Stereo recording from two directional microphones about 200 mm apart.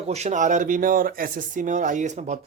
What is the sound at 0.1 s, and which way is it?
Speech, 35° right (ahead or behind).